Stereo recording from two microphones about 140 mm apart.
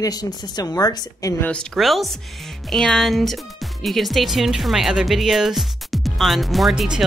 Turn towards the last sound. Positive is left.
turn(degrees=-5)  # may be behind; listen again after turning